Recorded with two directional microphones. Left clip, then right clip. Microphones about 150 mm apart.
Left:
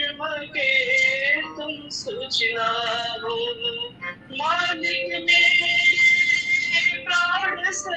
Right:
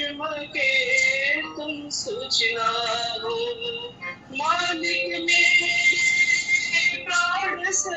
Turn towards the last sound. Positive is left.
turn(degrees=-15)  # may be behind; listen again after turning